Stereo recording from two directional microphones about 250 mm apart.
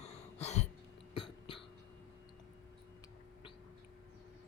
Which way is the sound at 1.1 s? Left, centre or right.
Left.